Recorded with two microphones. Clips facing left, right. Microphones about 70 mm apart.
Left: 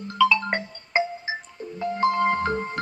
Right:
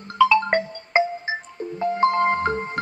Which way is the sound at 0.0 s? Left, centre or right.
Right.